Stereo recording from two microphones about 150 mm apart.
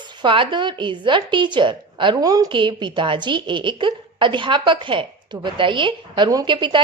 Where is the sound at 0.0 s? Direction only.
30° right (ahead or behind).